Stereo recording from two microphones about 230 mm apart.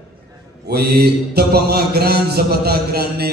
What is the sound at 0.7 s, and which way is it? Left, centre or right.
A man's voice, right.